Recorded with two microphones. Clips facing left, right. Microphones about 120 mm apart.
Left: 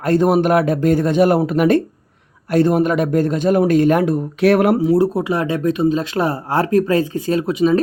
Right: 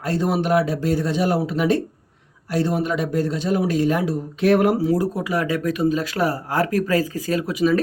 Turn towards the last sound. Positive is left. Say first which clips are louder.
# left 4 dB
turn(degrees=25)  # may be behind; listen again after turning